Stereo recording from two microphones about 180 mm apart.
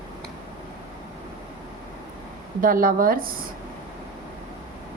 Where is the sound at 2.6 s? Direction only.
50° right (ahead or behind).